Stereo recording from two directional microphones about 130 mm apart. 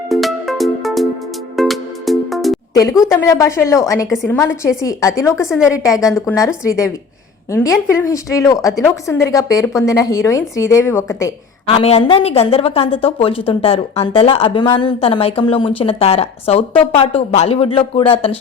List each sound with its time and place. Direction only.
0.1 s music: centre (ahead or behind)
2.7 s speech: 25° left (ahead or behind)
5.5 s a woman's voice: 5° right (ahead or behind)
5.7 s speech: 25° left (ahead or behind)
11.6 s a woman's voice: 50° left (ahead or behind)